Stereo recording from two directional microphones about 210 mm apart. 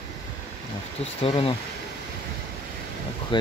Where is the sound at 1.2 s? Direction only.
25° left (ahead or behind).